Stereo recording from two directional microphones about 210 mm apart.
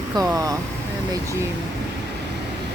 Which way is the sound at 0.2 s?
15° right (ahead or behind).